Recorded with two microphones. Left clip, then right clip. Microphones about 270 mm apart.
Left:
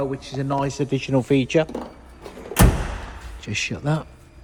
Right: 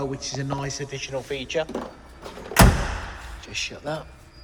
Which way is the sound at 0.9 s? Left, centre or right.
Centre.